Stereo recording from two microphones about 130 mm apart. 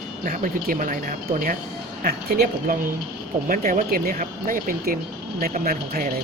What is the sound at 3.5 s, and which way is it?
Speech, 90° right.